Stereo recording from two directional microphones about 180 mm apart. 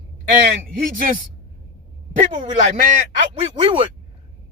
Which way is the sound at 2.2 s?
40° right (ahead or behind).